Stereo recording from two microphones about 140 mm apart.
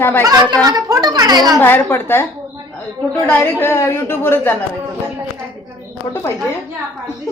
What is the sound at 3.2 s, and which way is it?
A woman's voice, 15° left (ahead or behind).